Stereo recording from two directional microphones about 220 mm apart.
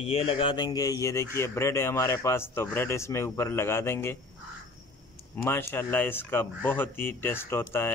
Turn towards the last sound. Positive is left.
turn(degrees=10)  # may be behind; listen again after turning